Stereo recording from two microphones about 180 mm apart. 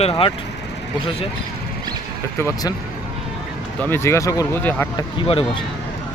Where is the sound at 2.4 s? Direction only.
20° left (ahead or behind).